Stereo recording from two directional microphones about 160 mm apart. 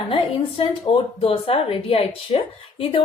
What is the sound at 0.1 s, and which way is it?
A woman's voice, 35° left (ahead or behind).